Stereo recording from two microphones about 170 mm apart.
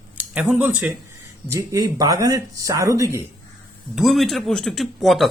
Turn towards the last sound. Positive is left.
turn(degrees=0)  # may be behind; listen again after turning